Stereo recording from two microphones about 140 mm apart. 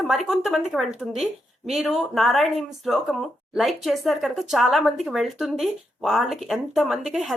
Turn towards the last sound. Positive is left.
turn(degrees=0)  # may be behind; listen again after turning